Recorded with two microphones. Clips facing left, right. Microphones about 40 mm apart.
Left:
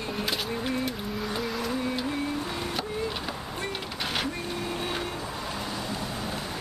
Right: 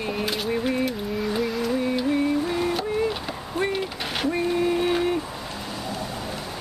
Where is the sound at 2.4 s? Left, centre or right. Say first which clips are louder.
Right 8 dB; centre.